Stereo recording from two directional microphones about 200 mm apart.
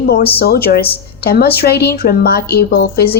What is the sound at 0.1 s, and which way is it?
A woman's voice, 50° left (ahead or behind).